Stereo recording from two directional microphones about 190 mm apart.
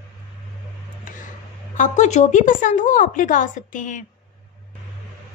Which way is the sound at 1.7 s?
40° left (ahead or behind).